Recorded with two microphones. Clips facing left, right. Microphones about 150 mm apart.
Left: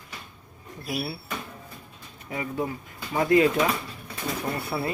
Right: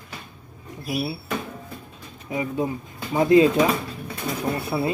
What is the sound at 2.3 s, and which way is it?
Speech, 20° right (ahead or behind).